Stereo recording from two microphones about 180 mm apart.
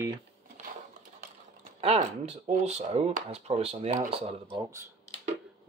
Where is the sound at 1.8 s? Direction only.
35° right (ahead or behind).